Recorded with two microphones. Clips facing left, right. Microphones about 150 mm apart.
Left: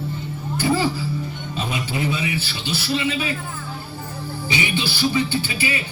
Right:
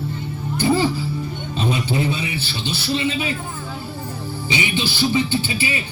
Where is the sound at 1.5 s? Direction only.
30° right (ahead or behind).